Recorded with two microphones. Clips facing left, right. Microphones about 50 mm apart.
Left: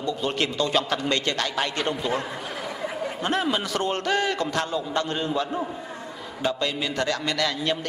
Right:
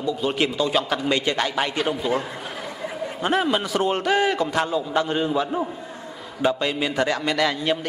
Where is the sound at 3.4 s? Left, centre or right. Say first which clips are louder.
Right 3 dB; centre.